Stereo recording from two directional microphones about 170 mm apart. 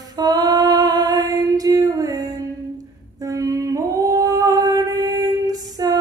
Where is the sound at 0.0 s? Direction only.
20° right (ahead or behind).